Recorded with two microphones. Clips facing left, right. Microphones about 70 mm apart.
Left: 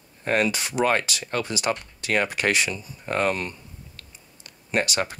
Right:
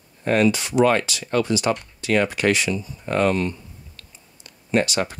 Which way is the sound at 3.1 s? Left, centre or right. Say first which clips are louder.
Right 4 dB; centre.